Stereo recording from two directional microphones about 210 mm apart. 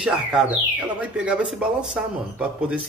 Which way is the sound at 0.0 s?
5° right (ahead or behind).